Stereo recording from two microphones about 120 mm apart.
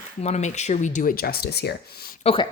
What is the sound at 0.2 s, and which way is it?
Speech, 65° left (ahead or behind).